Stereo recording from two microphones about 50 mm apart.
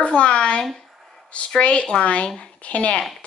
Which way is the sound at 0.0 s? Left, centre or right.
Left.